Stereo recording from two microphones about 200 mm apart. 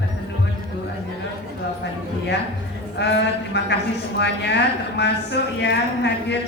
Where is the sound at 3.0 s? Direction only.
60° left (ahead or behind).